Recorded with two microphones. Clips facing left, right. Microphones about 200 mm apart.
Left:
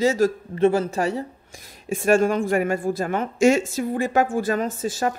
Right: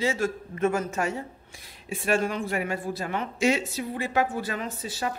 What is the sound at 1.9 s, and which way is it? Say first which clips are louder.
A woman's voice: left 7 dB; 45° left (ahead or behind).